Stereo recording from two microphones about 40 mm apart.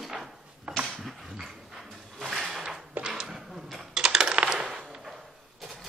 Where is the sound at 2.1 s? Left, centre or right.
Centre.